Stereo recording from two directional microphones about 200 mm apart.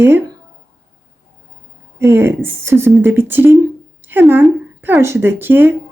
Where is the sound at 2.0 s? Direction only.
10° right (ahead or behind).